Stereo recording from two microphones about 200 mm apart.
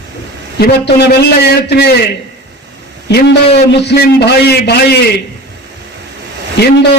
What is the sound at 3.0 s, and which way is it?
A man's voice, 55° left (ahead or behind).